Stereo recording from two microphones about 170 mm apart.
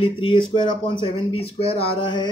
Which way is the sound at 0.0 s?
30° left (ahead or behind).